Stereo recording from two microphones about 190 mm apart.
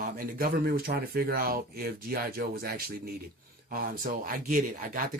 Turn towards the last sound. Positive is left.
turn(degrees=-45)  # may be behind; listen again after turning